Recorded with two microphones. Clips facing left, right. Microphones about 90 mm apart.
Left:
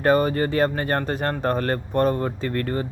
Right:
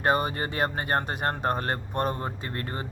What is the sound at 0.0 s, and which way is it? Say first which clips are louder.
Speech: left 6 dB; 20° right (ahead or behind).